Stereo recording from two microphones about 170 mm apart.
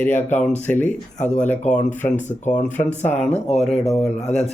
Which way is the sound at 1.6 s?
45° left (ahead or behind).